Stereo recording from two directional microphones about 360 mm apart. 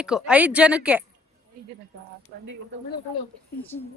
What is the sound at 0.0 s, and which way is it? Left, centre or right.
Speech, centre.